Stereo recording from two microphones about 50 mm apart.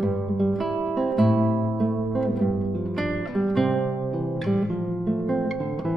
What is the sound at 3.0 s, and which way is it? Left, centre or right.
Guitar, centre.